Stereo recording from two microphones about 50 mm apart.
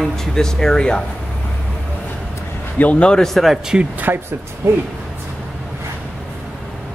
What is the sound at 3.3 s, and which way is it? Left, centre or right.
Speech, centre.